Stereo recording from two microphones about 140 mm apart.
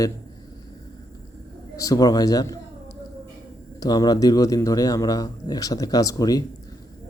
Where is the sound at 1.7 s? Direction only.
25° left (ahead or behind).